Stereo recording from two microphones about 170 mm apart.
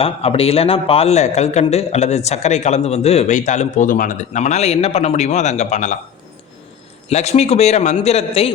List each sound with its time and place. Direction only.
0.0 s a man's voice: 35° left (ahead or behind)
7.1 s a man's voice: 40° left (ahead or behind)